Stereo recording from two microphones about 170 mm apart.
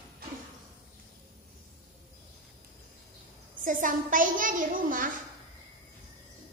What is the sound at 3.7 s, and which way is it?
A woman's voice, 50° right (ahead or behind).